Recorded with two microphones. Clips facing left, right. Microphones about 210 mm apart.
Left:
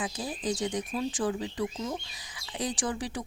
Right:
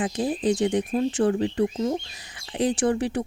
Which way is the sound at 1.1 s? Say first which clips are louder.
Right 9 dB; 65° right (ahead or behind).